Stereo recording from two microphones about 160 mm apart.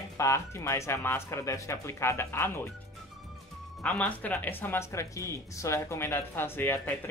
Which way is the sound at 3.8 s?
10° left (ahead or behind).